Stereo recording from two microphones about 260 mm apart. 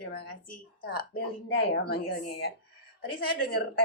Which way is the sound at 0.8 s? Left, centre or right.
Left.